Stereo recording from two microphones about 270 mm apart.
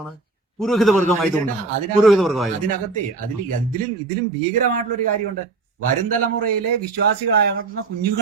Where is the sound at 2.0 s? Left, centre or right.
Centre.